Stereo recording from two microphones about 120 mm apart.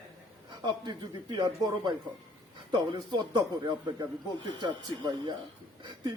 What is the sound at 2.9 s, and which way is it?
Speech, 35° right (ahead or behind).